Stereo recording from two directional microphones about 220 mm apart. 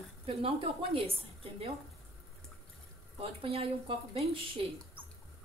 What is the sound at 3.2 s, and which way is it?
A woman's voice, 25° right (ahead or behind).